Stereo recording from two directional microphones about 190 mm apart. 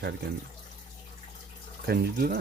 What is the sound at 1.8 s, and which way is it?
Speech, 50° right (ahead or behind).